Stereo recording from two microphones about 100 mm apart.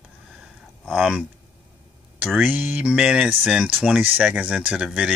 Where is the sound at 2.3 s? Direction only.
20° right (ahead or behind).